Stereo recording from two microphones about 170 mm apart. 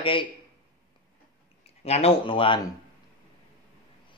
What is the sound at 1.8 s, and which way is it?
Speech, 35° left (ahead or behind).